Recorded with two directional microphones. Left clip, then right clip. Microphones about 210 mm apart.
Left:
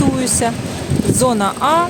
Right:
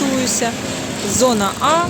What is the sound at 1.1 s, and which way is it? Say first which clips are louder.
Speech: even; 10° left (ahead or behind).